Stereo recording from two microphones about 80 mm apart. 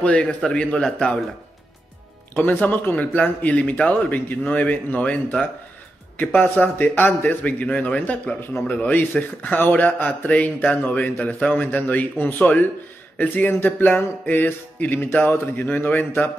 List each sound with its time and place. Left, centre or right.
0.0 s a man's voice: centre
2.3 s a man's voice: left
11.3 s a man's voice: centre
11.6 s speech: centre